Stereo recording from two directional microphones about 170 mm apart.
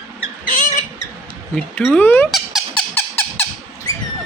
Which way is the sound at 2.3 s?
Centre (ahead or behind).